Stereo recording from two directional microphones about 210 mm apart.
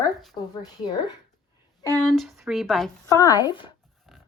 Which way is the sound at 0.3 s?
20° left (ahead or behind).